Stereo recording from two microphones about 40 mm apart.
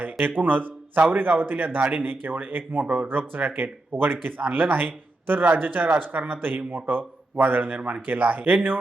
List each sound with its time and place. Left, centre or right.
0.3 s a man's voice: right
2.0 s a man's voice: right
7.8 s speech: right
8.0 s a man's voice: right